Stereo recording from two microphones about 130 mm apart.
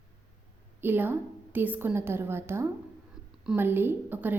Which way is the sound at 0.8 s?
15° right (ahead or behind).